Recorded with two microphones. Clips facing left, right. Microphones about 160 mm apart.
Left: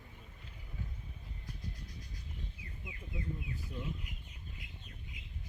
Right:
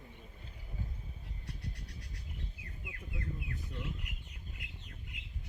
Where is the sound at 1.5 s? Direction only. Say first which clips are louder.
Right 1 dB; 75° right (ahead or behind).